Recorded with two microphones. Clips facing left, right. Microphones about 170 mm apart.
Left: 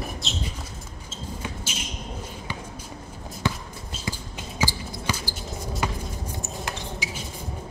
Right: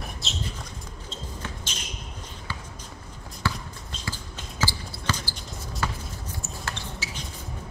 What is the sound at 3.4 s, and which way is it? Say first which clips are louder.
Basketball bounce: left 2 dB; 20° left (ahead or behind).